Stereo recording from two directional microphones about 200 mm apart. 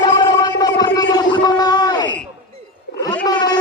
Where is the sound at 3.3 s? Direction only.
20° left (ahead or behind).